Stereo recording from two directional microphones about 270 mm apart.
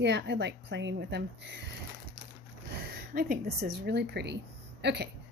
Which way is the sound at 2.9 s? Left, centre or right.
Right.